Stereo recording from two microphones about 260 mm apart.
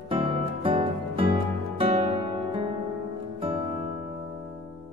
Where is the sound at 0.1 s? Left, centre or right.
Centre.